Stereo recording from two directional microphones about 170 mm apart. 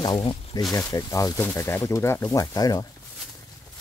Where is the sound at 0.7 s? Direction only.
20° left (ahead or behind).